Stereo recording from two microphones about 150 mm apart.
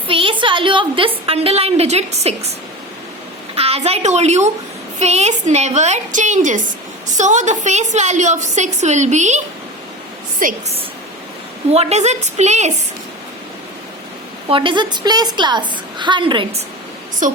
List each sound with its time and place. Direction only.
0.1 s a woman's voice: 35° right (ahead or behind)
3.5 s a woman's voice: 40° right (ahead or behind)
10.4 s a woman's voice: 65° right (ahead or behind)
11.7 s a woman's voice: 45° right (ahead or behind)
14.5 s a woman's voice: 35° right (ahead or behind)
17.2 s a woman's voice: 60° right (ahead or behind)